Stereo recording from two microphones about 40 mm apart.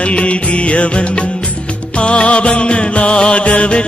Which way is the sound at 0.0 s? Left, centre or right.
Left.